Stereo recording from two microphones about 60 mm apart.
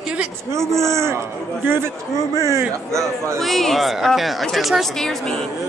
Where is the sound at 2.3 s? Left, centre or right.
Right.